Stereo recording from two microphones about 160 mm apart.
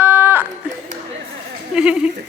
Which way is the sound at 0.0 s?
10° right (ahead or behind).